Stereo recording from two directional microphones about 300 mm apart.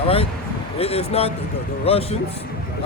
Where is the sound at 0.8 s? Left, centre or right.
Centre.